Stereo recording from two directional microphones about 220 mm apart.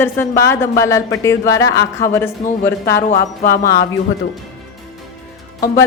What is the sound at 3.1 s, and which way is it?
Speech, 40° left (ahead or behind).